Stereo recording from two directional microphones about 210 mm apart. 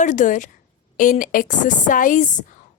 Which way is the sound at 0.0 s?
35° left (ahead or behind).